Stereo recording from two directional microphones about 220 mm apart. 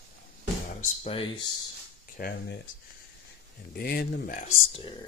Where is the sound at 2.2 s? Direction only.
40° left (ahead or behind).